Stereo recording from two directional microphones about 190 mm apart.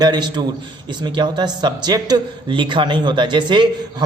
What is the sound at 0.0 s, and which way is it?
Speech, 20° right (ahead or behind).